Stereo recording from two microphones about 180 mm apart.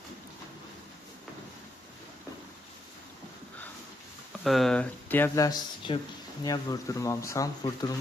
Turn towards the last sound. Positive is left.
turn(degrees=20)  # may be behind; listen again after turning